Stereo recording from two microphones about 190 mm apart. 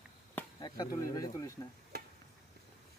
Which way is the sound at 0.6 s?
20° left (ahead or behind).